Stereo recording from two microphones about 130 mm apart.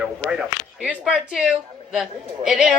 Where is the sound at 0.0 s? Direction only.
10° right (ahead or behind).